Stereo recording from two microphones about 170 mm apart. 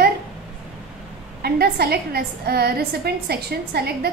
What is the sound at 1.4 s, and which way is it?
A woman's voice, 70° right (ahead or behind).